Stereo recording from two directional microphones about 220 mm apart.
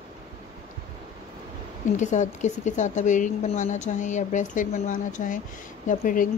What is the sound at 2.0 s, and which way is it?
Speech, 35° left (ahead or behind).